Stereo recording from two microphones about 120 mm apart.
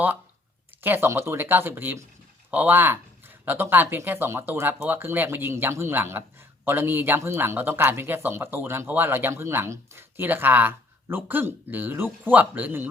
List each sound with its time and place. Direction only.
0.8 s speech: 20° right (ahead or behind)